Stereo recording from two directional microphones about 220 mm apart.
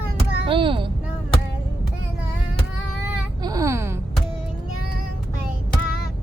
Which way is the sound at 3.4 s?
15° right (ahead or behind).